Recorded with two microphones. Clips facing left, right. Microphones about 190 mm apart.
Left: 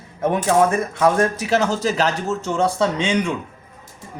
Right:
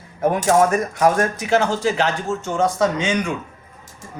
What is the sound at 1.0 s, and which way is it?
Speech, 35° left (ahead or behind).